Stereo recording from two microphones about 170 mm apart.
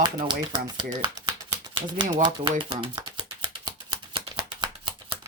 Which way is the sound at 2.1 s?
25° right (ahead or behind).